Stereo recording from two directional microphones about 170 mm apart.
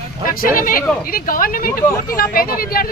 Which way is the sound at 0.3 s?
55° left (ahead or behind).